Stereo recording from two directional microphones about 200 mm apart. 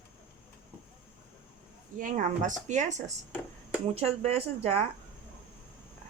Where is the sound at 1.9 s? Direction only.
40° right (ahead or behind).